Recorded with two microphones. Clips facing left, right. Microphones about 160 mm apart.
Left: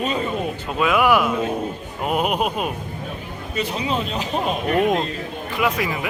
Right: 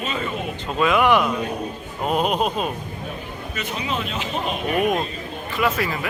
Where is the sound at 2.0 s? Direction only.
10° left (ahead or behind).